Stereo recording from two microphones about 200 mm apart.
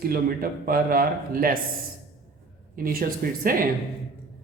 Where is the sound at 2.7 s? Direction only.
45° right (ahead or behind).